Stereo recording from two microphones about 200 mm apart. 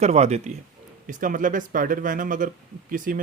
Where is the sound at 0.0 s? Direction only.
30° right (ahead or behind).